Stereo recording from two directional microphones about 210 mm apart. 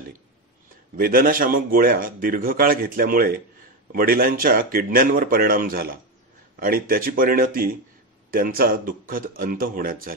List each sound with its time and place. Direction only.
0.9 s a man's voice: 45° right (ahead or behind)